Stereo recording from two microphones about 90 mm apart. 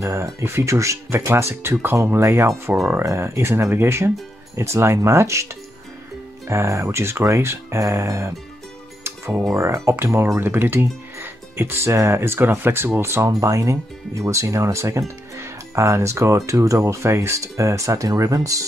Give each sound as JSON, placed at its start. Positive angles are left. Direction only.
{"t": 0.0, "sound": "speech", "side_deg": -35}
{"t": 9.0, "sound": "music", "side_deg": -30}
{"t": 9.4, "sound": "speech", "side_deg": -35}
{"t": 10.4, "sound": "speech", "side_deg": -25}